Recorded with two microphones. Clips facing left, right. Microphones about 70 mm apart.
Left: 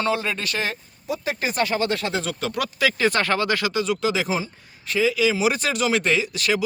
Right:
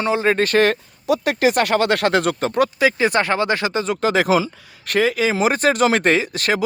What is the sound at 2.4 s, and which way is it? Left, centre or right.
Speech, right.